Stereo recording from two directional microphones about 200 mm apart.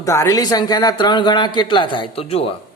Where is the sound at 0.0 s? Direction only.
15° left (ahead or behind).